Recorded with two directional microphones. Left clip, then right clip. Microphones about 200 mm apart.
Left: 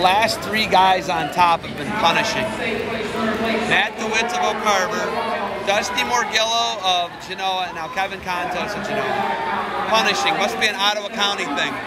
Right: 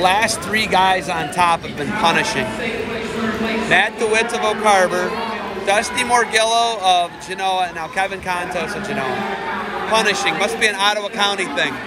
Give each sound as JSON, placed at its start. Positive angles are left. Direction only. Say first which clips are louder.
{"t": 0.0, "sound": "a man's voice", "louder": "right 1 dB", "side_deg": 20}
{"t": 3.7, "sound": "a man's voice", "louder": "right 6 dB", "side_deg": 15}
{"t": 9.8, "sound": "a man's voice", "louder": "right 1 dB", "side_deg": 20}